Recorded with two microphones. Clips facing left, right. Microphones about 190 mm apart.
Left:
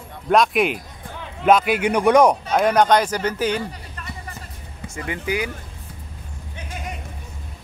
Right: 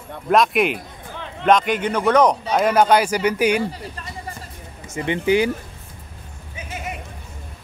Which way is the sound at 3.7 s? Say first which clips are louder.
Right 3 dB; 30° right (ahead or behind).